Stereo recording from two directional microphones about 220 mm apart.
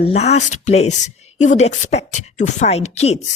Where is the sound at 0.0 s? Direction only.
30° left (ahead or behind).